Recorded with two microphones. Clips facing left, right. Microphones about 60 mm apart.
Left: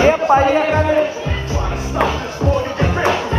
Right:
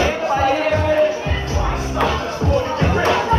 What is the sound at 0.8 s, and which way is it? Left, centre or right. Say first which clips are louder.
Music: even; centre.